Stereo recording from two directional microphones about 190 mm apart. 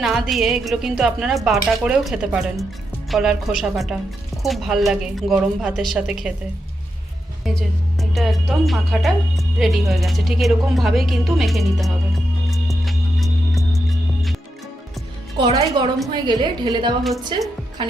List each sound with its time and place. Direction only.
0.0 s a woman's voice: centre (ahead or behind)
8.1 s a woman's voice: centre (ahead or behind)
12.5 s music: centre (ahead or behind)
15.4 s a woman's voice: 25° right (ahead or behind)